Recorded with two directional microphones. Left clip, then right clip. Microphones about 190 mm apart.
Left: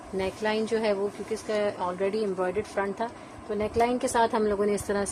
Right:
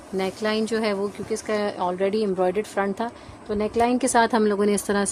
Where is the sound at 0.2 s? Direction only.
60° right (ahead or behind).